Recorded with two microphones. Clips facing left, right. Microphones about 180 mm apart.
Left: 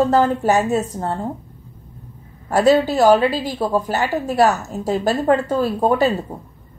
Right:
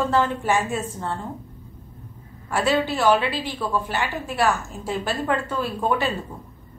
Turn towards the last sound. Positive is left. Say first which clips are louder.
# left 8 dB
turn(degrees=35)  # may be behind; listen again after turning